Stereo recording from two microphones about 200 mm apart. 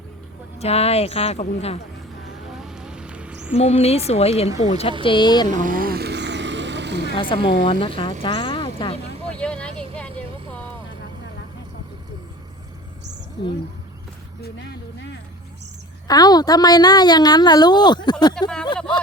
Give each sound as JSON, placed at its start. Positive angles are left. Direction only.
{"t": 0.6, "sound": "a woman's voice", "side_deg": 30}
{"t": 2.5, "sound": "a sound", "side_deg": 0}
{"t": 3.6, "sound": "a woman's voice", "side_deg": 30}
{"t": 5.5, "sound": "vehicle", "side_deg": -40}
{"t": 7.4, "sound": "a woman's voice", "side_deg": 25}
{"t": 9.3, "sound": "vehicle", "side_deg": 5}
{"t": 14.4, "sound": "speech", "side_deg": 55}
{"t": 16.0, "sound": "a woman's voice", "side_deg": 20}